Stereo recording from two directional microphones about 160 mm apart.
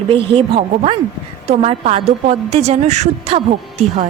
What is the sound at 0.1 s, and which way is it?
A woman's voice, 35° right (ahead or behind).